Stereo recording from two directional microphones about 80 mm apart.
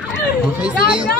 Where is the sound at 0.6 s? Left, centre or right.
Centre.